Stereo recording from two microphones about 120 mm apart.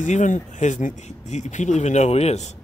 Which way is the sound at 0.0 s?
90° left.